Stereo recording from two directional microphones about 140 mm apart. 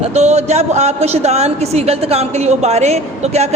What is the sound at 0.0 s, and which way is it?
A woman's voice, 50° right (ahead or behind).